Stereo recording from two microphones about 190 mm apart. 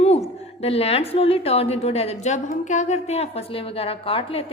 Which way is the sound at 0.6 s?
30° left (ahead or behind).